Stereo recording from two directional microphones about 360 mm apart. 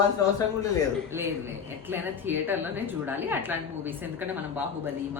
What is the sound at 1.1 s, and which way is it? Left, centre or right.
A man's voice, centre.